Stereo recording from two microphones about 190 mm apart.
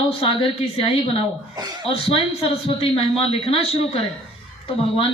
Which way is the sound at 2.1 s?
30° left (ahead or behind).